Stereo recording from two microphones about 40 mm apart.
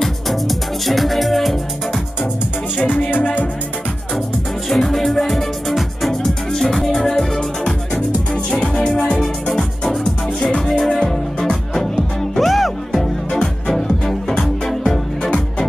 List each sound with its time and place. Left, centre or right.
0.0 s music: centre
4.6 s music: centre
10.9 s music: centre
13.3 s music: centre